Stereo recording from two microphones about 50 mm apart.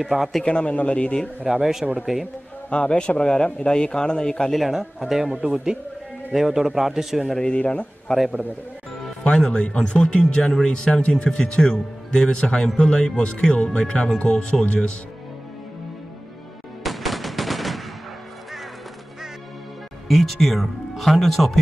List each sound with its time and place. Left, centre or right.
0.0 s speech: centre
0.5 s speech: left
1.4 s a man's voice: centre
2.7 s speech: left
4.6 s speech: centre
5.2 s speech: right
6.3 s a man's voice: centre
7.3 s speech: left
9.5 s speech: left
16.8 s machine gun: centre
20.1 s speech: centre